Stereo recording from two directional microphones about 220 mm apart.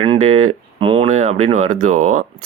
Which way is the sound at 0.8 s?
25° right (ahead or behind).